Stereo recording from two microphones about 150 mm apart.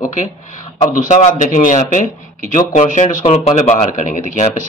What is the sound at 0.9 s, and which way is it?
Speech, 55° left (ahead or behind).